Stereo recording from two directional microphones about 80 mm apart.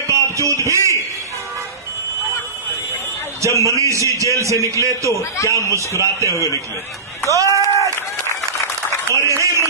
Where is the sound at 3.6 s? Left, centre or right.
Right.